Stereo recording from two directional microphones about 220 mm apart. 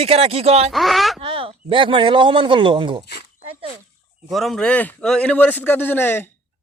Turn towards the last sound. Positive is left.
turn(degrees=10)  # may be behind; listen again after turning